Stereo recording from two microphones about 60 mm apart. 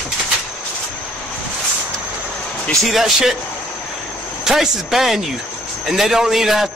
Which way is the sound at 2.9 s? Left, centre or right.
Centre.